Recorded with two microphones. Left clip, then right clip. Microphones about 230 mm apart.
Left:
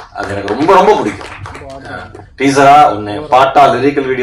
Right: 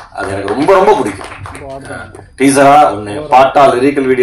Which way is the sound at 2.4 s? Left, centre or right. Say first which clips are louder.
Even; right.